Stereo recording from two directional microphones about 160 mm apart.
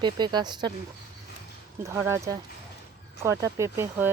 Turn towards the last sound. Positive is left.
turn(degrees=-15)  # may be behind; listen again after turning